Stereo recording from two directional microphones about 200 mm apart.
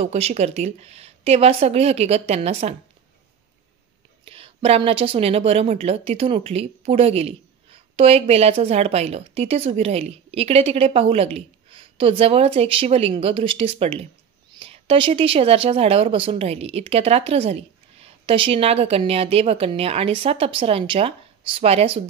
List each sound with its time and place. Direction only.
0.0 s a woman's voice: 35° right (ahead or behind)
4.2 s a woman's voice: 25° right (ahead or behind)